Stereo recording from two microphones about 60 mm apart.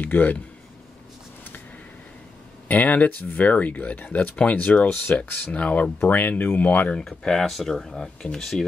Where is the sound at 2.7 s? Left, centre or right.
Left.